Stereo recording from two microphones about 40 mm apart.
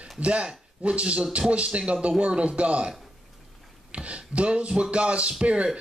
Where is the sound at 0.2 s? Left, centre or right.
Right.